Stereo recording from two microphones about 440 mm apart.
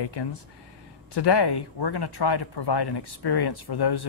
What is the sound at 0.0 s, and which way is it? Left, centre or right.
Speech, left.